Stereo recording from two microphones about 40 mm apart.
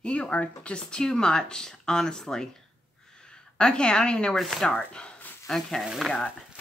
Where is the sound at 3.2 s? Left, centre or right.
Left.